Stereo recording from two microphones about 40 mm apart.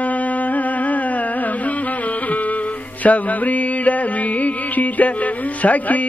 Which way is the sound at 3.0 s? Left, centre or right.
Left.